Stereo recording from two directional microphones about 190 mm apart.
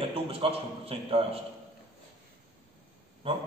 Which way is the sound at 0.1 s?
30° right (ahead or behind).